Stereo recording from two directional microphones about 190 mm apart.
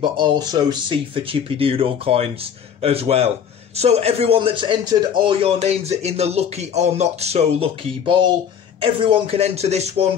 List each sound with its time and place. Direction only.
0.0 s a man's voice: 25° right (ahead or behind)